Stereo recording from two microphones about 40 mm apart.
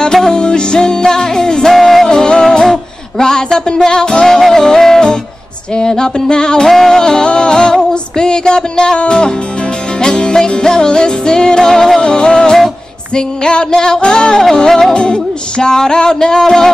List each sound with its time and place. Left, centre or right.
0.0 s music: centre
1.8 s music: centre
2.0 s music: centre
4.3 s music: centre
6.7 s music: centre